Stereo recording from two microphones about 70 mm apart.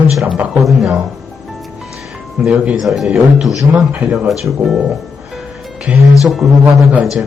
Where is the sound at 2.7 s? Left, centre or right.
Centre.